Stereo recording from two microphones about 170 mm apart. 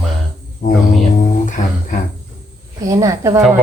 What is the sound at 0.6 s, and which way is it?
Speech, 55° left (ahead or behind).